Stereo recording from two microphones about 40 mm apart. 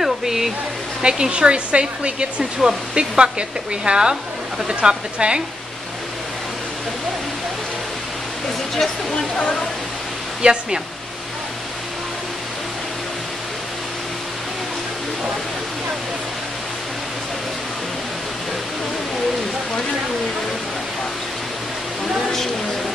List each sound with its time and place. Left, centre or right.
0.0 s waterfall: centre
1.0 s speech: centre
10.4 s speech: right